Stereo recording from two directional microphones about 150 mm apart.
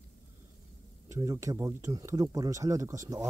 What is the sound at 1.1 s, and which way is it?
Speech, 20° right (ahead or behind).